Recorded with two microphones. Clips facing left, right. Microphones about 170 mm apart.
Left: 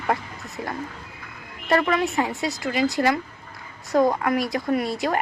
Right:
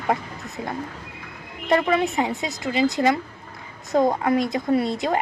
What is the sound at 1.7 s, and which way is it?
A woman's voice, 15° right (ahead or behind).